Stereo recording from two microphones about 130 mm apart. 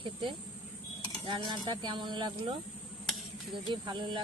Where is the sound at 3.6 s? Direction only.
35° right (ahead or behind).